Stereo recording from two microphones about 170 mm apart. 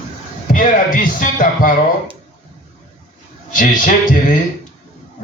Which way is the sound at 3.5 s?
50° left (ahead or behind).